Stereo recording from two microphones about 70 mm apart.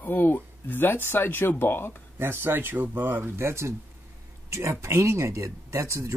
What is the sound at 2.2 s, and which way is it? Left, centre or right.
Speech, right.